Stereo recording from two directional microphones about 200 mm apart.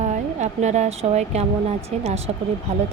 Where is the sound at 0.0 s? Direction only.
35° right (ahead or behind).